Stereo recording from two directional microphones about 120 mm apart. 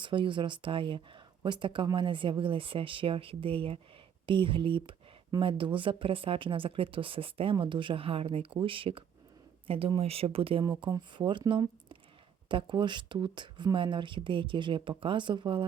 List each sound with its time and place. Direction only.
0.0 s speech: 45° right (ahead or behind)